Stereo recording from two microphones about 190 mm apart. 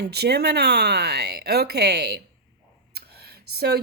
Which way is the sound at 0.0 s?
60° right (ahead or behind).